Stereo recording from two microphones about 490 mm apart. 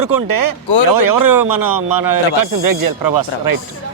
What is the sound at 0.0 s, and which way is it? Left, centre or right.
A man's voice, right.